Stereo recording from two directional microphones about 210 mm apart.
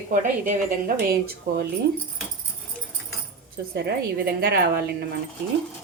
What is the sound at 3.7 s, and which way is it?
A woman's voice, 50° right (ahead or behind).